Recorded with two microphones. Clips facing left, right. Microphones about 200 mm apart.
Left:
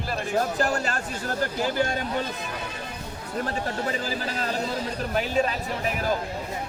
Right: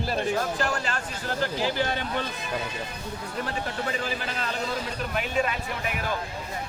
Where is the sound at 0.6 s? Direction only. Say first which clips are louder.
Left 3 dB; 40° left (ahead or behind).